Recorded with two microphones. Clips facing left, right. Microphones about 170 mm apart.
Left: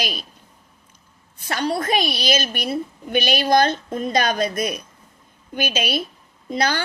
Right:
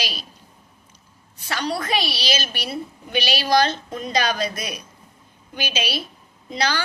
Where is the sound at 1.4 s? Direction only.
50° left (ahead or behind).